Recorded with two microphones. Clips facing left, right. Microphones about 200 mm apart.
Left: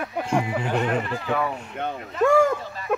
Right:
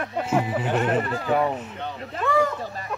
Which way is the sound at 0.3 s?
5° right (ahead or behind).